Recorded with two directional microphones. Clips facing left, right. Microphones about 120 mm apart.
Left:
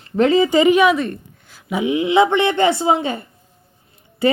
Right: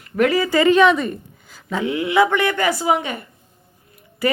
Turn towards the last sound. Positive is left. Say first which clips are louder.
# left 4 dB
turn(degrees=25)  # may be behind; listen again after turning